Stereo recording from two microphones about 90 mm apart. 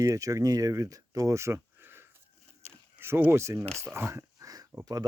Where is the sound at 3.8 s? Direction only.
30° right (ahead or behind).